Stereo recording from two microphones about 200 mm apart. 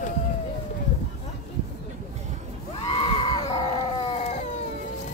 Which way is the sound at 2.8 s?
25° left (ahead or behind).